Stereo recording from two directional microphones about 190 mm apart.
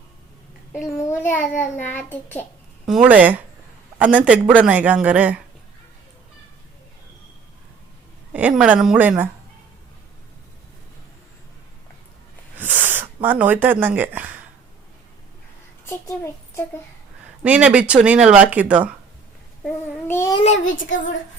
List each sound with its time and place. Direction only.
1.3 s a child's voice: 10° left (ahead or behind)
2.8 s speech: 5° right (ahead or behind)
8.3 s speech: 5° right (ahead or behind)
12.5 s a sound: 10° right (ahead or behind)
15.9 s a child's voice: 15° left (ahead or behind)
17.4 s speech: 5° right (ahead or behind)
19.6 s a child's voice: 15° left (ahead or behind)
20.4 s a child's voice: 35° left (ahead or behind)